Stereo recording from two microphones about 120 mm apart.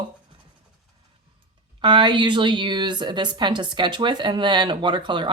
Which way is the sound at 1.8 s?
40° right (ahead or behind).